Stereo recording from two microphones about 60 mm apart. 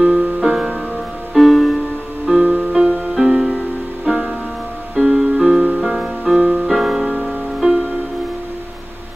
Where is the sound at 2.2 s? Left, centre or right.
Centre.